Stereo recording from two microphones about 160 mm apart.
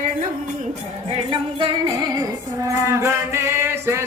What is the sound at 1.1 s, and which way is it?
Music, 35° right (ahead or behind).